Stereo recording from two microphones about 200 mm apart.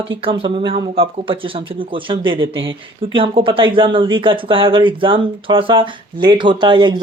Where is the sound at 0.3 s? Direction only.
25° right (ahead or behind).